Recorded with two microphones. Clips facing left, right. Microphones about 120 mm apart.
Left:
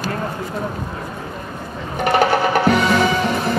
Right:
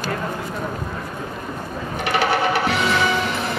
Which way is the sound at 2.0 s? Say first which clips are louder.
Left 4 dB; 45° left (ahead or behind).